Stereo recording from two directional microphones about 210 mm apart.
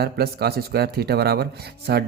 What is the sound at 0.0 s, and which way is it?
Speech, 50° right (ahead or behind).